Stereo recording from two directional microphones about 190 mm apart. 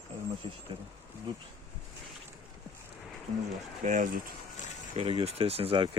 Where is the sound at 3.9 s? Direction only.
45° right (ahead or behind).